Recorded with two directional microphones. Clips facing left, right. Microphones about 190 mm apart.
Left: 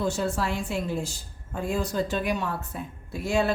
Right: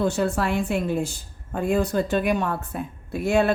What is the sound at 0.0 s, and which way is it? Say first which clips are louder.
A woman's voice: right 4 dB; 60° right (ahead or behind).